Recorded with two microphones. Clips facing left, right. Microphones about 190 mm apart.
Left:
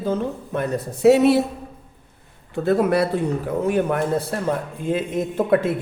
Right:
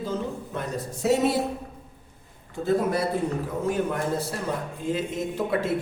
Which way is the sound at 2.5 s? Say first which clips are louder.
Left 5 dB; 70° left (ahead or behind).